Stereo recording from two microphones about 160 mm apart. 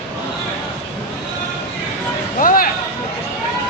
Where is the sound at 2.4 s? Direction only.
60° left (ahead or behind).